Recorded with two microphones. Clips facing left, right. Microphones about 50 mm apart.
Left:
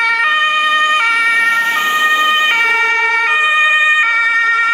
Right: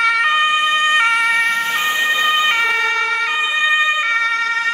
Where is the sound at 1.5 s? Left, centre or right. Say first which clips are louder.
Left 4 dB; left.